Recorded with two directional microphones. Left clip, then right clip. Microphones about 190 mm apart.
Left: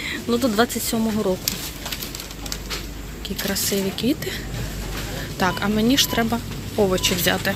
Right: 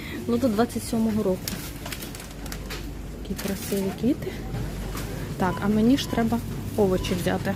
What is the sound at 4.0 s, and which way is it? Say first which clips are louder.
Speech: left 3 dB; 5° right (ahead or behind).